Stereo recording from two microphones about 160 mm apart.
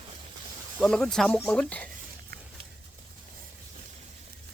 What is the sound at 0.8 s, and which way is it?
Speech, 5° left (ahead or behind).